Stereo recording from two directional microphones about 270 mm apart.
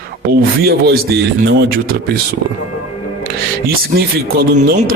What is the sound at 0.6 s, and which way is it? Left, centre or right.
Speech, right.